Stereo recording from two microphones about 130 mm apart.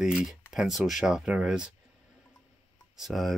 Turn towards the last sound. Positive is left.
turn(degrees=0)  # may be behind; listen again after turning